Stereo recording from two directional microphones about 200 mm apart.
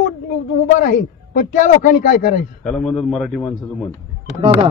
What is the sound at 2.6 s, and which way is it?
Speech, centre (ahead or behind).